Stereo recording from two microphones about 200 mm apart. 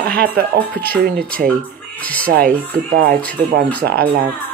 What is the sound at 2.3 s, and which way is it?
Speech, 45° right (ahead or behind).